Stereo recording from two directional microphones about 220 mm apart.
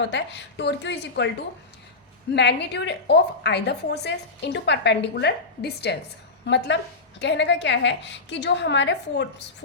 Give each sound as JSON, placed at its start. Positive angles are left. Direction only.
{"t": 0.1, "sound": "a woman's voice", "side_deg": 50}
{"t": 2.3, "sound": "a woman's voice", "side_deg": 50}